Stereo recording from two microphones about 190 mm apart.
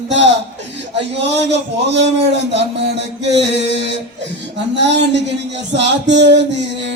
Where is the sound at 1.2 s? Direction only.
65° right (ahead or behind).